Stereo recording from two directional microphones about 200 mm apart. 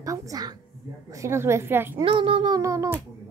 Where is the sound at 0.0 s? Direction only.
15° right (ahead or behind).